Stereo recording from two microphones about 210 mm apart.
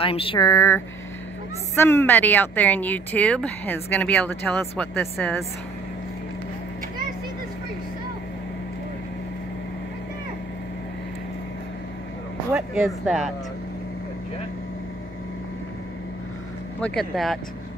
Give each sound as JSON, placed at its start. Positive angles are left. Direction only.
{"t": 0.0, "sound": "speech", "side_deg": 25}
{"t": 12.5, "sound": "speech", "side_deg": 0}
{"t": 17.1, "sound": "speech", "side_deg": 0}